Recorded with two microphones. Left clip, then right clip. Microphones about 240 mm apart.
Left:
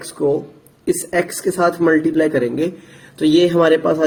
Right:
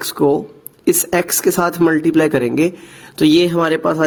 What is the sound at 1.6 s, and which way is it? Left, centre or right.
Speech, right.